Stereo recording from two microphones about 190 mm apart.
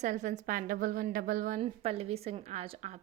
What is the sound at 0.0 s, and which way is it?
A woman's voice, 40° right (ahead or behind).